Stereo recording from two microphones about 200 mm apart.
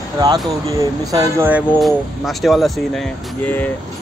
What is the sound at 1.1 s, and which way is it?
Speech, 10° right (ahead or behind).